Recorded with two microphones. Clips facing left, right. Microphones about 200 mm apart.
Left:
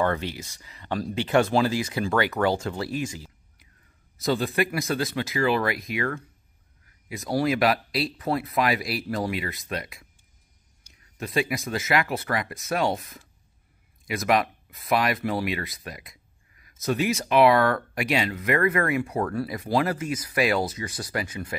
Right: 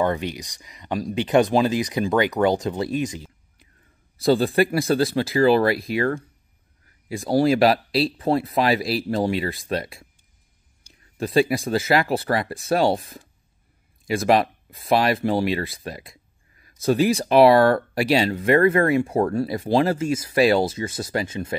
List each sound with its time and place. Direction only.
0.0 s speech: 15° right (ahead or behind)
4.2 s speech: 30° right (ahead or behind)